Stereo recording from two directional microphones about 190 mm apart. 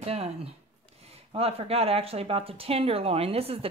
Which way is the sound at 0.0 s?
35° right (ahead or behind).